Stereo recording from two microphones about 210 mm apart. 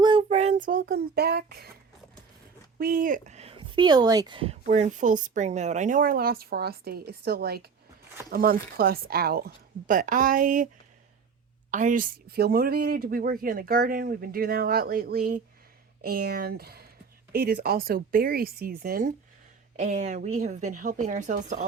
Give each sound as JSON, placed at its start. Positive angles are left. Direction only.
{"t": 0.0, "sound": "child singing", "side_deg": -25}
{"t": 2.7, "sound": "speech", "side_deg": -45}
{"t": 4.6, "sound": "speech", "side_deg": -35}
{"t": 11.7, "sound": "speech", "side_deg": -35}